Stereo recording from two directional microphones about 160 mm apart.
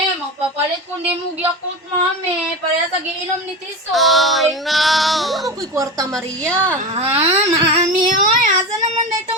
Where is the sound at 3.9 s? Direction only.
Centre (ahead or behind).